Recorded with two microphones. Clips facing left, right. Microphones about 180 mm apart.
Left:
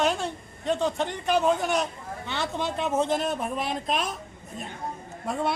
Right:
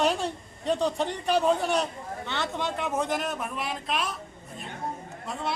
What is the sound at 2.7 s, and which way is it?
Speech, 25° left (ahead or behind).